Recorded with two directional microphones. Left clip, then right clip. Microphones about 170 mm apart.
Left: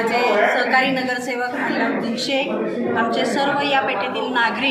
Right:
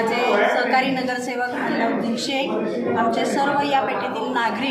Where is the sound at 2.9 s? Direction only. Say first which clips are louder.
Left 1 dB; 10° right (ahead or behind).